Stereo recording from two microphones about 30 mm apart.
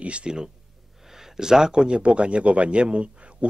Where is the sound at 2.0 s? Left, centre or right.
Right.